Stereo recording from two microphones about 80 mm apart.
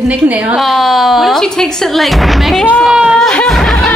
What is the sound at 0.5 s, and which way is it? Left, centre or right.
Speech, centre.